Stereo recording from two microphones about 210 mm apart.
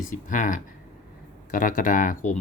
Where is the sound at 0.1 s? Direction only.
40° left (ahead or behind).